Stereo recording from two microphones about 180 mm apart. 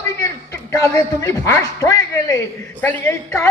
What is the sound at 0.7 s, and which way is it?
Speech, 20° left (ahead or behind).